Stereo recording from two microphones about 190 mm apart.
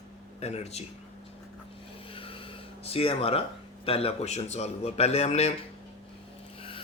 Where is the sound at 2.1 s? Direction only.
30° left (ahead or behind).